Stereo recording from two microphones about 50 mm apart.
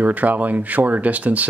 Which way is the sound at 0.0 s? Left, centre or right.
Right.